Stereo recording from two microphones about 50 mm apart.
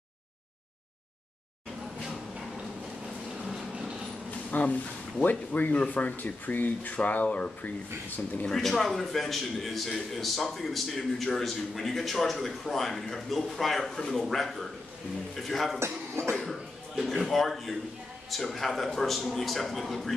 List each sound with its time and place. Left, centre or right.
4.5 s speech: left
8.5 s a man's voice: centre
15.8 s a man's voice: right
16.4 s a man's voice: centre